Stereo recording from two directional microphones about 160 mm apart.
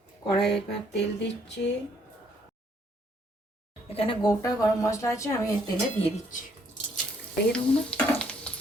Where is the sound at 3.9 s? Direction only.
35° left (ahead or behind).